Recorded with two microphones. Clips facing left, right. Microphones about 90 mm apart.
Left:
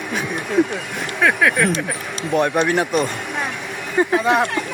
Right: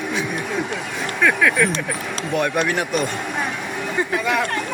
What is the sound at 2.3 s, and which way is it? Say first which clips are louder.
Speech: left 3 dB; 30° left (ahead or behind).